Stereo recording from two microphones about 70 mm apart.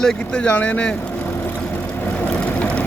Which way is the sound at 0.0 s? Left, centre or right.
Centre.